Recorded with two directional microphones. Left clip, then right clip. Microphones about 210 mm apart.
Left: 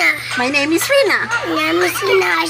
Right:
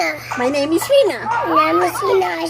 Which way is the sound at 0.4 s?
20° left (ahead or behind).